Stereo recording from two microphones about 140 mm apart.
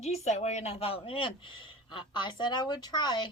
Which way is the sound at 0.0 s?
50° left (ahead or behind).